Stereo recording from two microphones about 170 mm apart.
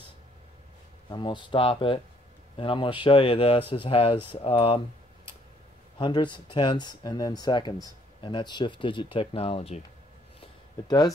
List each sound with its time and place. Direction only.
1.1 s speech: 25° left (ahead or behind)
5.9 s speech: 30° left (ahead or behind)
10.9 s speech: 25° left (ahead or behind)